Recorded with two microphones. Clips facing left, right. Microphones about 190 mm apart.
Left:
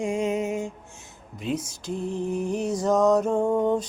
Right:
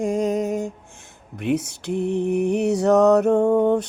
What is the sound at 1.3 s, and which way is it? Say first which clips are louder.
Lullaby: right 6 dB; 65° right (ahead or behind).